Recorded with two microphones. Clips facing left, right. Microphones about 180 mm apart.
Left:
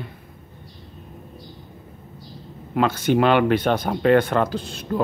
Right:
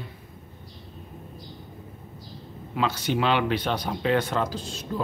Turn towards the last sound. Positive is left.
turn(degrees=60)  # may be behind; listen again after turning